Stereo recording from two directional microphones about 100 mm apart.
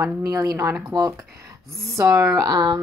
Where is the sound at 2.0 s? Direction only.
35° right (ahead or behind).